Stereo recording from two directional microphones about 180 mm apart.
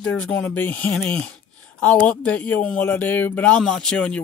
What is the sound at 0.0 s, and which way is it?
Speech, 5° left (ahead or behind).